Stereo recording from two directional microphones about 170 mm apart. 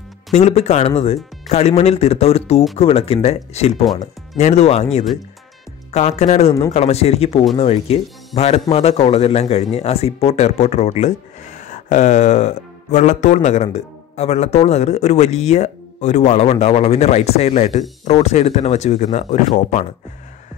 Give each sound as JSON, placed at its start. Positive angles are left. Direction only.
{"t": 0.3, "sound": "a man's voice", "side_deg": 40}